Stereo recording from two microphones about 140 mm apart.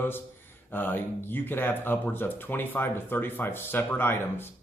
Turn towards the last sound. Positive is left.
turn(degrees=15)  # may be behind; listen again after turning